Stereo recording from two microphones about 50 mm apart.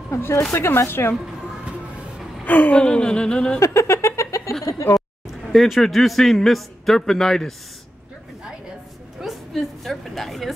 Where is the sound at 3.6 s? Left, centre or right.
Left.